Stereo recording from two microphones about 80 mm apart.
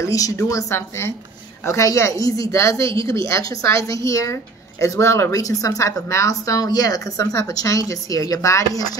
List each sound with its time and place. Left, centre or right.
0.0 s a woman's voice: left